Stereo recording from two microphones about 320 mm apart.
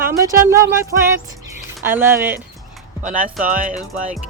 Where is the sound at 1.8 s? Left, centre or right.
Centre.